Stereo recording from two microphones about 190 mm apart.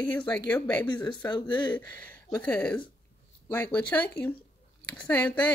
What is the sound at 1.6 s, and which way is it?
Speech, 10° left (ahead or behind).